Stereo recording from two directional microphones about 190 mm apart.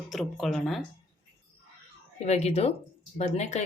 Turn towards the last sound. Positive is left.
turn(degrees=35)  # may be behind; listen again after turning